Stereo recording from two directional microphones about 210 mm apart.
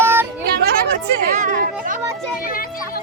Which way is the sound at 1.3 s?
35° right (ahead or behind).